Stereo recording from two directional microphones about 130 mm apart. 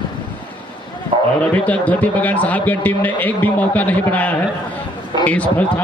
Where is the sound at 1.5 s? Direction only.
10° left (ahead or behind).